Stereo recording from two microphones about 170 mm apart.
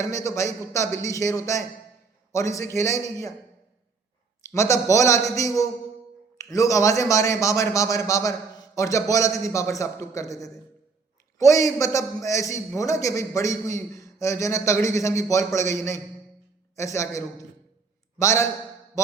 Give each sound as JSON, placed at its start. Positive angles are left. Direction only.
{"t": 0.0, "sound": "a man's voice", "side_deg": 20}
{"t": 4.5, "sound": "a man's voice", "side_deg": 15}